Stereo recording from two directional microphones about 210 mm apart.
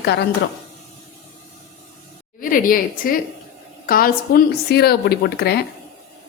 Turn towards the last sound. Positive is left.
turn(degrees=50)  # may be behind; listen again after turning